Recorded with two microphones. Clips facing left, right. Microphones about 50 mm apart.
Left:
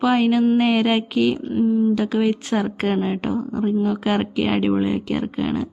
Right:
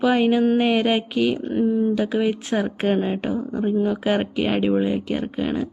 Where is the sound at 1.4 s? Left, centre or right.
Right.